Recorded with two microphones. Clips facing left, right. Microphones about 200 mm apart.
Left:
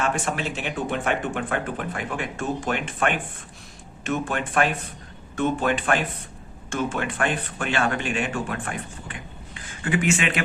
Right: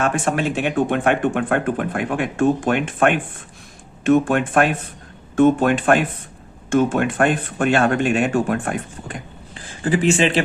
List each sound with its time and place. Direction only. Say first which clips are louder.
0.0 s speech: right 6 dB; 55° right (ahead or behind); by 10.4 s 30° right (ahead or behind)